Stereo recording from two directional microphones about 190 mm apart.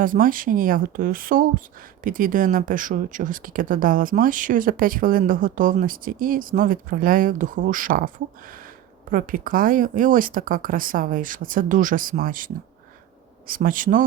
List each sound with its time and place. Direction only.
0.0 s speech: 45° right (ahead or behind)
13.5 s speech: 45° right (ahead or behind)